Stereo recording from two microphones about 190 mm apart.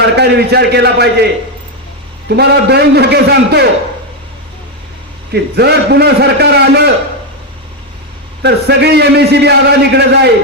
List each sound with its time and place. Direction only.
0.2 s a man's voice: 60° right (ahead or behind)
2.3 s a man's voice: 60° right (ahead or behind)
5.3 s a man's voice: 60° right (ahead or behind)
8.4 s a man's voice: 60° right (ahead or behind)